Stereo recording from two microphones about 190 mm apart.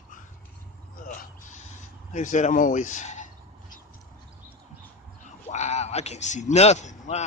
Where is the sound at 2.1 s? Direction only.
40° left (ahead or behind).